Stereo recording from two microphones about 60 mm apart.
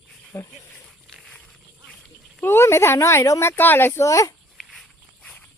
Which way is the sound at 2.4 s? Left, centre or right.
Left.